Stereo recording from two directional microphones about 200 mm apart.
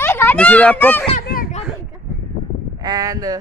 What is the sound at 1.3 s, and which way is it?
Children playing, 45° left (ahead or behind).